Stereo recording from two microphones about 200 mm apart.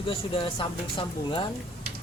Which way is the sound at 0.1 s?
25° left (ahead or behind).